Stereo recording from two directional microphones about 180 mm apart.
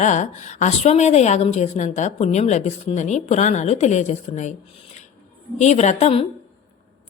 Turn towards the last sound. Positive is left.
turn(degrees=35)  # may be behind; listen again after turning